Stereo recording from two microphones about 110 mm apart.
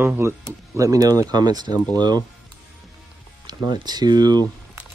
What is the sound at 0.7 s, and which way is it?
Speech, 35° right (ahead or behind).